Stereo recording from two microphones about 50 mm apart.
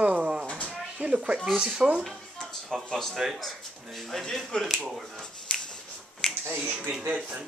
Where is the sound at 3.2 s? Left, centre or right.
Centre.